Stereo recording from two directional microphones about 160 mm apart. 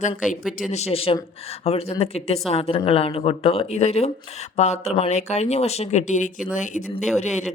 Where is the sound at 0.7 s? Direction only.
40° left (ahead or behind).